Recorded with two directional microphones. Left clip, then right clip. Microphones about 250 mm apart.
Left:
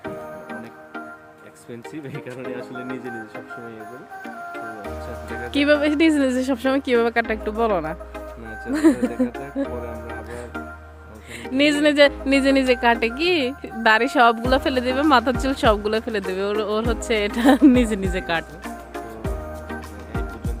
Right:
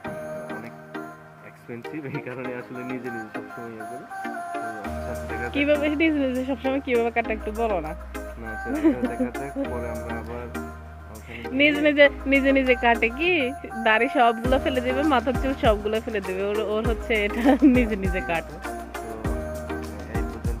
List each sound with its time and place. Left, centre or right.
5.5 s speech: left
11.5 s speech: left